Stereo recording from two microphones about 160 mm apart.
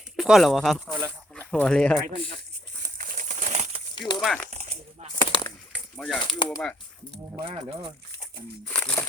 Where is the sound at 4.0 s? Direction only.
25° left (ahead or behind).